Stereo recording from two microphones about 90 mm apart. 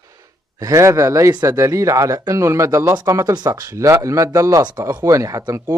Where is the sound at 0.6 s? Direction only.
35° right (ahead or behind).